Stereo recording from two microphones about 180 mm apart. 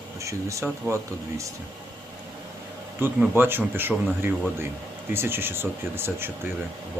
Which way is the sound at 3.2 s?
10° right (ahead or behind).